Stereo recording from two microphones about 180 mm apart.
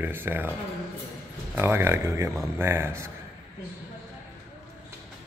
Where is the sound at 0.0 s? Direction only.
10° right (ahead or behind).